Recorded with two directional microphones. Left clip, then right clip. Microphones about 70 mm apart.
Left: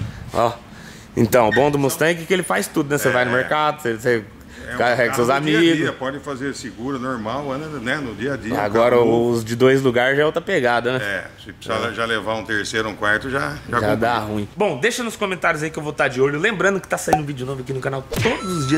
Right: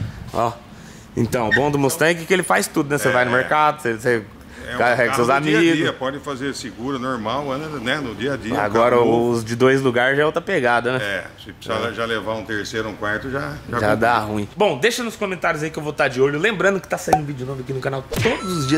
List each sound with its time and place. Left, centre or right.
0.3 s speech: centre
1.7 s a man's voice: centre